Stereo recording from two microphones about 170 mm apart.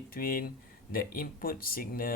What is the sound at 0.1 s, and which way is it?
Speech, 55° left (ahead or behind).